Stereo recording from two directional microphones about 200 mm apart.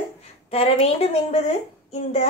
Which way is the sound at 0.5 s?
30° left (ahead or behind).